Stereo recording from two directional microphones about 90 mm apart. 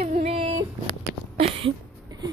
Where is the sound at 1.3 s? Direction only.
90° right.